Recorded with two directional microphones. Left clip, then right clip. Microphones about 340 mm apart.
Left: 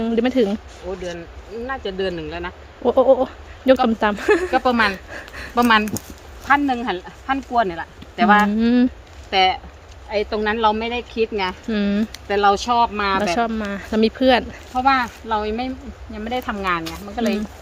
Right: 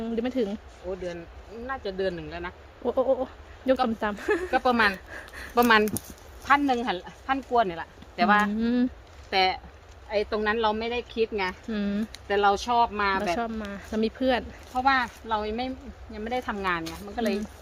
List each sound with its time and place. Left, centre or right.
0.0 s speech: centre
1.6 s speech: centre
4.5 s speech: centre
5.1 s speech: centre
5.5 s speech: centre
8.5 s speech: centre